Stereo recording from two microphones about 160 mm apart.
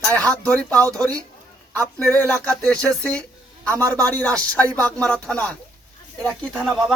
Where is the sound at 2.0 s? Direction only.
10° left (ahead or behind).